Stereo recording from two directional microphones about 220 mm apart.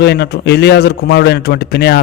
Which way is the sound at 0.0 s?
50° left (ahead or behind).